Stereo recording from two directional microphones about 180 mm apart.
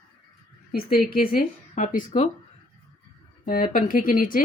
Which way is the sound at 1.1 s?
55° left (ahead or behind).